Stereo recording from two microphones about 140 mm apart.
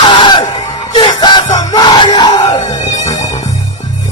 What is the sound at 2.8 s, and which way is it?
Music, 60° left (ahead or behind).